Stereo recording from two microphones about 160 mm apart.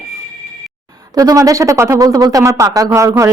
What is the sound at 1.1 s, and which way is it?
A woman's voice, 20° right (ahead or behind).